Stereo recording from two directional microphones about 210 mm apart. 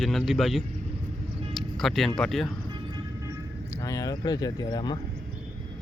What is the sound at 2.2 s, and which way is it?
Speech, centre (ahead or behind).